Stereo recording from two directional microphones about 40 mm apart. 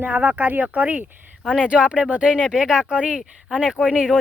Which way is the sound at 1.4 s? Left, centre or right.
Right.